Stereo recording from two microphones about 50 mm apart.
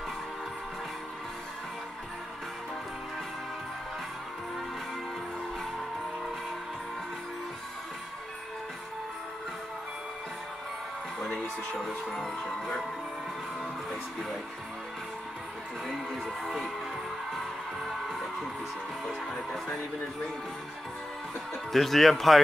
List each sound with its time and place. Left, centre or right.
11.8 s music: centre
16.4 s music: centre
17.8 s music: centre
21.7 s music: centre